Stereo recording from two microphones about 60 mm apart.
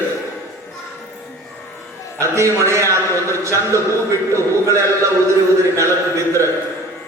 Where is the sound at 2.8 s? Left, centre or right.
Left.